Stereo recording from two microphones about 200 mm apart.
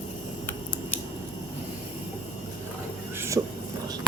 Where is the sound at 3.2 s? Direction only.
15° right (ahead or behind).